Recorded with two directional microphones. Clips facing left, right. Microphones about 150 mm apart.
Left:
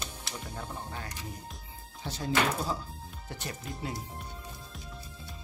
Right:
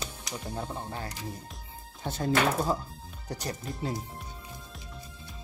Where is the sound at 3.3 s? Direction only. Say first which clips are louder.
Right 5 dB; 40° right (ahead or behind).